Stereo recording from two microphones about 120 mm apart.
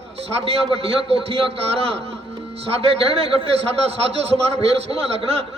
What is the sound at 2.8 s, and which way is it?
A man's voice, 55° right (ahead or behind).